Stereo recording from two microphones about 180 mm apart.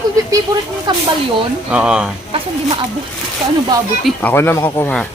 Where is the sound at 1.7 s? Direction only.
5° right (ahead or behind).